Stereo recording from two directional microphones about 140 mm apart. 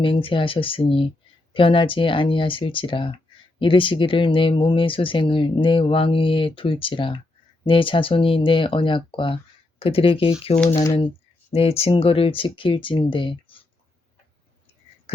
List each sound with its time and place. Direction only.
0.0 s speech: 40° left (ahead or behind)
10.7 s speech: 25° left (ahead or behind)
11.5 s speech: 45° left (ahead or behind)